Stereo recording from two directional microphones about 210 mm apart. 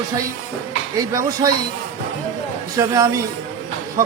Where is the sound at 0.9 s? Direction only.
15° right (ahead or behind).